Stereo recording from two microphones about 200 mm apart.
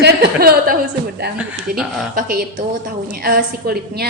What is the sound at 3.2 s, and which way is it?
Speech, 50° right (ahead or behind).